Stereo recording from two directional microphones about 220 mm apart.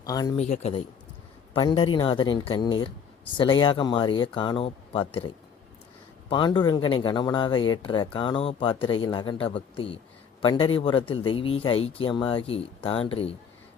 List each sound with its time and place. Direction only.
0.0 s a man's voice: 15° left (ahead or behind)
0.3 s a man's voice: 30° left (ahead or behind)